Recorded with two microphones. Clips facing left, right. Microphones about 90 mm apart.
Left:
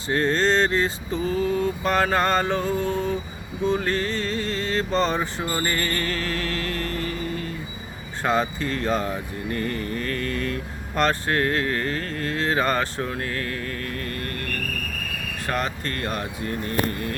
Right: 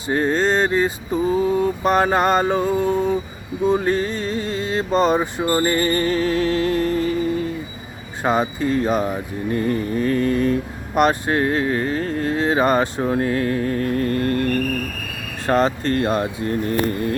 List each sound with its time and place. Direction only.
0.1 s speech: 10° right (ahead or behind); by 16.6 s 30° right (ahead or behind)